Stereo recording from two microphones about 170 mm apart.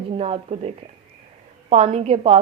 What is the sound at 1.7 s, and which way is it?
Speech, 35° right (ahead or behind).